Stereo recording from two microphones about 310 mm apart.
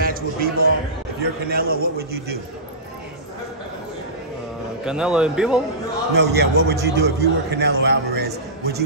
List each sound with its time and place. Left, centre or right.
0.0 s a sound: right
1.5 s a man's voice: right
4.8 s a man's voice: centre
6.1 s a man's voice: right